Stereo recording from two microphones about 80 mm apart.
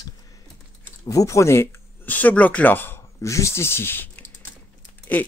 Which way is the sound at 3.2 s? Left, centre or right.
Left.